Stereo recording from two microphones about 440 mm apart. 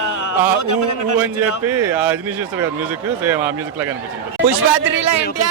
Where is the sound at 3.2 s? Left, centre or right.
Centre.